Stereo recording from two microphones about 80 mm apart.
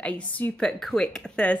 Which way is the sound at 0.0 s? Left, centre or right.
Centre.